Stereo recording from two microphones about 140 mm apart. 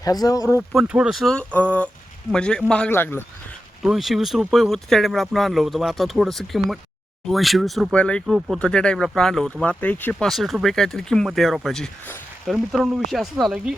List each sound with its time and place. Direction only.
0.0 s speech: 25° left (ahead or behind)
0.7 s a man's voice: 5° right (ahead or behind); by 3.2 s 15° left (ahead or behind)
3.8 s a man's voice: centre (ahead or behind)